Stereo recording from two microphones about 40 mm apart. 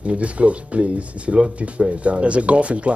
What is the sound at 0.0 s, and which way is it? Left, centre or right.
Speech, right.